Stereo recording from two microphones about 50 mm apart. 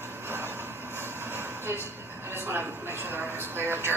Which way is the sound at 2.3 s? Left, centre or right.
Right.